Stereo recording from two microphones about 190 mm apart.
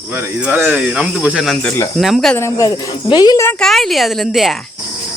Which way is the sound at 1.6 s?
15° left (ahead or behind).